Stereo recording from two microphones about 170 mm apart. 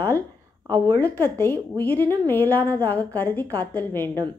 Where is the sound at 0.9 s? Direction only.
10° left (ahead or behind).